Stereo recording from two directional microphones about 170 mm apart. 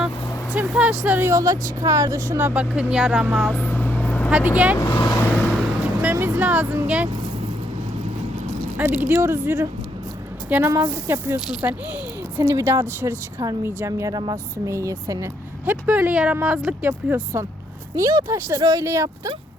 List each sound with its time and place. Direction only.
0.5 s a woman's voice: 5° right (ahead or behind)
3.5 s vehicle: 10° left (ahead or behind)
4.3 s a woman's voice: 10° right (ahead or behind)
4.8 s speech: 25° left (ahead or behind)
6.0 s vehicle: 10° right (ahead or behind)
8.8 s a woman's voice: 10° right (ahead or behind)